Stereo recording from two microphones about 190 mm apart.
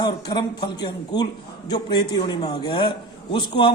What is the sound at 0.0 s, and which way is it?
A man's voice, 20° left (ahead or behind).